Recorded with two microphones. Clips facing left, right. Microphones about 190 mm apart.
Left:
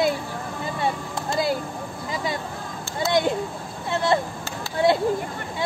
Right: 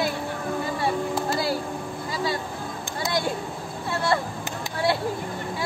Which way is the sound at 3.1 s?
20° left (ahead or behind).